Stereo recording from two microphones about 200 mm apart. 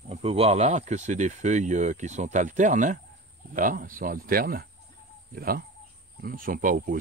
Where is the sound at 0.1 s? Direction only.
30° right (ahead or behind).